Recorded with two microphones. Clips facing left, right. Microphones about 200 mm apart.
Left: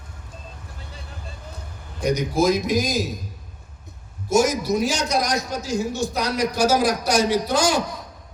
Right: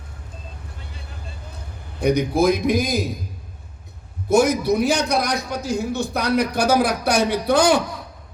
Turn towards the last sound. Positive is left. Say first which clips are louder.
# right 3 dB
turn(degrees=-60)  # may be behind; listen again after turning